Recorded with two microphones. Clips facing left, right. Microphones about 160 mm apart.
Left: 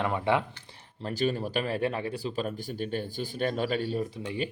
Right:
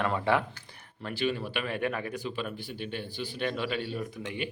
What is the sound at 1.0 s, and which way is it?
Speech, 35° left (ahead or behind).